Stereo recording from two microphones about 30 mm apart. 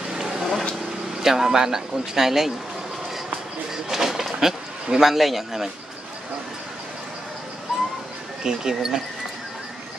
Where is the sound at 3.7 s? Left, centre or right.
Centre.